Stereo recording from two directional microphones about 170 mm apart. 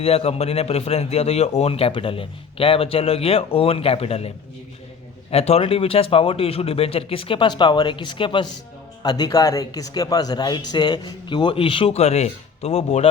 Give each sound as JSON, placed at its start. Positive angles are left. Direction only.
{"t": 0.0, "sound": "a man's voice", "side_deg": 35}
{"t": 5.3, "sound": "a man's voice", "side_deg": 35}